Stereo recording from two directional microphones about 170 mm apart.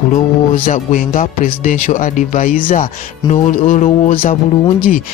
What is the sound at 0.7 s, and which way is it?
Speech, 50° left (ahead or behind).